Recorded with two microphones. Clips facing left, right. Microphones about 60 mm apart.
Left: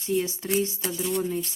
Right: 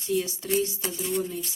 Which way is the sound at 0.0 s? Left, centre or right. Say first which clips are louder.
Left 1 dB; left.